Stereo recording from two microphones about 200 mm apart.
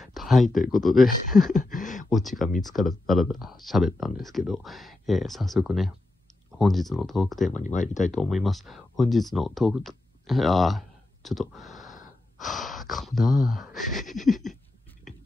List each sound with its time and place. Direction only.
0.0 s a sound: centre (ahead or behind)
0.7 s speech: centre (ahead or behind)
1.5 s speech: 40° left (ahead or behind)
2.0 s speech: centre (ahead or behind)
7.5 s speech: 40° left (ahead or behind)
8.1 s speech: centre (ahead or behind)